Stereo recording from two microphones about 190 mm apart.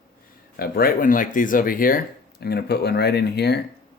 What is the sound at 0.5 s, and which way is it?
Speech, 50° left (ahead or behind).